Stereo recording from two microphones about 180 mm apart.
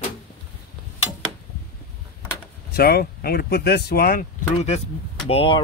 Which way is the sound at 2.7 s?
60° left (ahead or behind).